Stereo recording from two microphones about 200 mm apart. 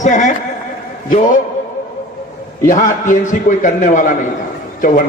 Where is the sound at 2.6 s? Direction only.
40° left (ahead or behind).